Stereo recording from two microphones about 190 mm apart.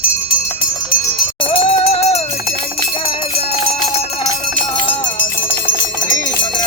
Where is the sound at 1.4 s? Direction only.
30° left (ahead or behind).